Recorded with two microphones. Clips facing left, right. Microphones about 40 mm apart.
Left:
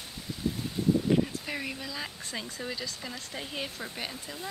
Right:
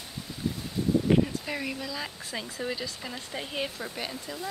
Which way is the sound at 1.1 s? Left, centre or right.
Right.